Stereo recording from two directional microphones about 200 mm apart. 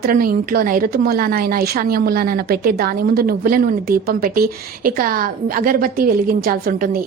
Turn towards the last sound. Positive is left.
turn(degrees=-45)  # may be behind; listen again after turning